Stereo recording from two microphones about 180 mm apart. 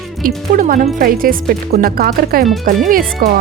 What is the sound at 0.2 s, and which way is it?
Speech, 50° right (ahead or behind).